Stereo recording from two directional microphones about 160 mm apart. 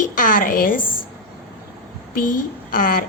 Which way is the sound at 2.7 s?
60° left (ahead or behind).